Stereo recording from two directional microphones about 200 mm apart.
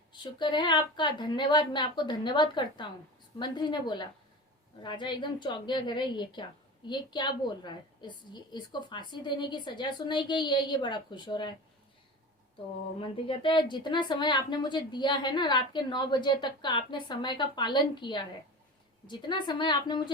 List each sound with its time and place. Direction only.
0.1 s a woman's voice: 20° left (ahead or behind)
13.0 s a woman's voice: 25° left (ahead or behind)